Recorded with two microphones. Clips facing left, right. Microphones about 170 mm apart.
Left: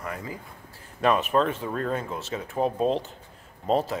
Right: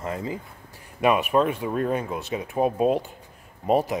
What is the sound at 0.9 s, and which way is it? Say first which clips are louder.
Speech: right 2 dB; 10° right (ahead or behind).